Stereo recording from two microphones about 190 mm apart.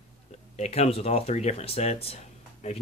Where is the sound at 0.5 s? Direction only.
35° left (ahead or behind).